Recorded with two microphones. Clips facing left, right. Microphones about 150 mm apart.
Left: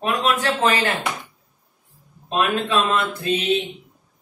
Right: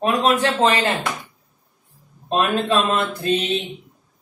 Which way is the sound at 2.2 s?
35° right (ahead or behind).